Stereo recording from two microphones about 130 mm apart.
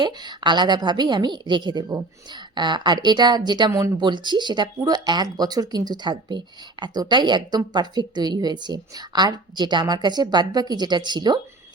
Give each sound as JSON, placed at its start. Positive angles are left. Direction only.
{"t": 0.0, "sound": "speech", "side_deg": -35}
{"t": 3.7, "sound": "speech", "side_deg": -20}
{"t": 4.0, "sound": "speech", "side_deg": -35}